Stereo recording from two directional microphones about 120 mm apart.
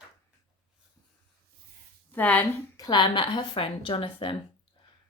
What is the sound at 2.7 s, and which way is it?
A woman's voice, 35° left (ahead or behind).